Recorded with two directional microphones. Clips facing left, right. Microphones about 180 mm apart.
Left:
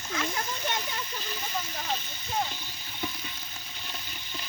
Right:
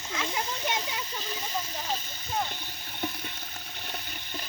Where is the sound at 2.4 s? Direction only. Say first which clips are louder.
Right 1 dB; 55° right (ahead or behind).